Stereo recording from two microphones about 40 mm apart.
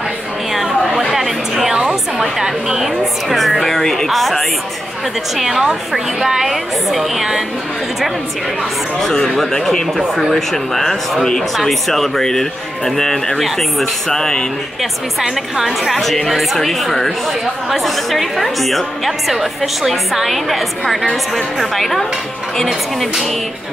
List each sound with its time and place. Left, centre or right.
0.5 s chatter: centre
1.1 s a sound: centre
1.7 s a sound: right
2.3 s music: centre
5.4 s a woman's voice: centre
9.0 s speech: centre
15.2 s a woman's voice: centre